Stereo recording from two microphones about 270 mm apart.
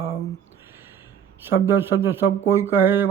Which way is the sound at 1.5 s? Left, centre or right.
Centre.